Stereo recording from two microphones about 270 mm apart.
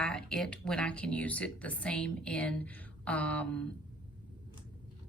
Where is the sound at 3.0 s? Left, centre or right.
Centre.